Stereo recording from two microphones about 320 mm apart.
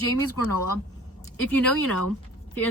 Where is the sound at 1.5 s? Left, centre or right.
Centre.